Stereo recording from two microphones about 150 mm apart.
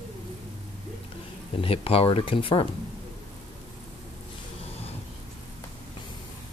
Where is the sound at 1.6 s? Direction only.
40° left (ahead or behind).